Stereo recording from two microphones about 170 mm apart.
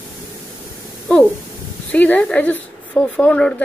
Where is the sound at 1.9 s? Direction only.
10° left (ahead or behind).